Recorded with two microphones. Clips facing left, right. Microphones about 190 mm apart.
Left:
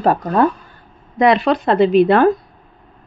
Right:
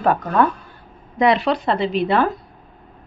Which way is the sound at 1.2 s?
55° left (ahead or behind).